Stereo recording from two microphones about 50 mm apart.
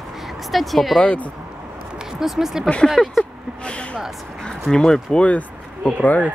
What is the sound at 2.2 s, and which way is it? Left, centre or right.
Speech, centre.